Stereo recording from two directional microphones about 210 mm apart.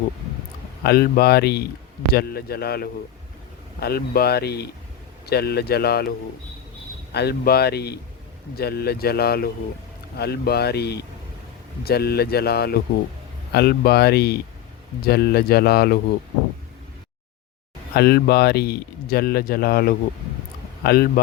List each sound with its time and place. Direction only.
0.9 s speech: 45° left (ahead or behind)
17.9 s speech: 50° left (ahead or behind)